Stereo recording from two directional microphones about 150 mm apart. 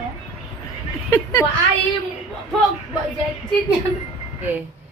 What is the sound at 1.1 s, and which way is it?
Speech, 20° left (ahead or behind).